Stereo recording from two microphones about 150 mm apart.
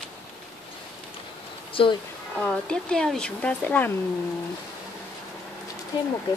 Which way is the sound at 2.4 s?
5° left (ahead or behind).